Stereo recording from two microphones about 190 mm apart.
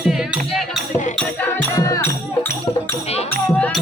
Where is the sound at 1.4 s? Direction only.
15° left (ahead or behind).